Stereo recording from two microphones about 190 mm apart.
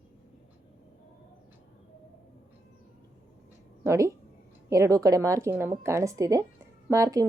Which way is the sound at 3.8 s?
15° right (ahead or behind).